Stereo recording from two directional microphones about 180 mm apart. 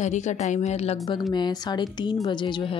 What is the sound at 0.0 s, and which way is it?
Speech, 40° left (ahead or behind).